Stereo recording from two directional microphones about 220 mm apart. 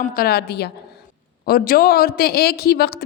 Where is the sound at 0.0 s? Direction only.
40° left (ahead or behind).